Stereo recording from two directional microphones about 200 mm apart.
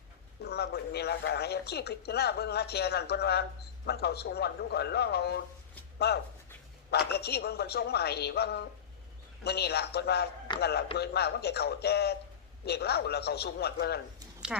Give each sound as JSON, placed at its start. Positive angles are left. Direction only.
{"t": 0.4, "sound": "a woman's voice", "side_deg": 55}